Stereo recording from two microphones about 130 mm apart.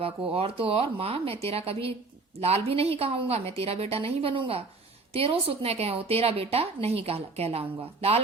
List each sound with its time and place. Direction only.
0.3 s a woman's voice: 45° right (ahead or behind)